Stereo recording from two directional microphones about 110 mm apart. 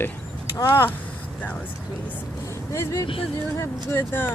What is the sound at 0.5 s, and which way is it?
Speech, 25° left (ahead or behind).